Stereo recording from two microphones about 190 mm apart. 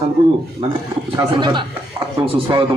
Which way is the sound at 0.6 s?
30° right (ahead or behind).